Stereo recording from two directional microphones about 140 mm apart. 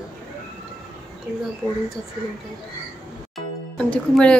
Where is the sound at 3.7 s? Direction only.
5° left (ahead or behind).